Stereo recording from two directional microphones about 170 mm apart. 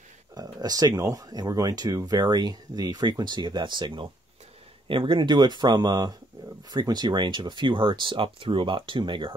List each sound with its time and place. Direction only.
0.3 s speech: 20° right (ahead or behind)